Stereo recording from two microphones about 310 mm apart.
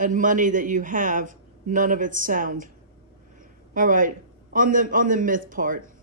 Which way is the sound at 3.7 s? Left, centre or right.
Right.